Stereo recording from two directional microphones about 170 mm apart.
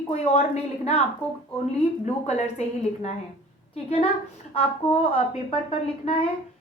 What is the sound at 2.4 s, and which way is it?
A woman's voice, 40° left (ahead or behind).